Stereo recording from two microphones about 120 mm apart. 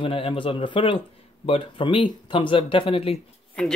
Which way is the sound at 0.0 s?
50° left (ahead or behind).